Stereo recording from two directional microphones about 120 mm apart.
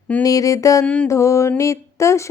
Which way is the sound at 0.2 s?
30° left (ahead or behind).